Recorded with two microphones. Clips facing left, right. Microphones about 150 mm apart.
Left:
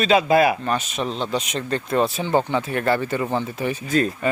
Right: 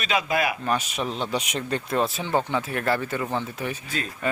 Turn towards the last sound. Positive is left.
turn(degrees=45)  # may be behind; listen again after turning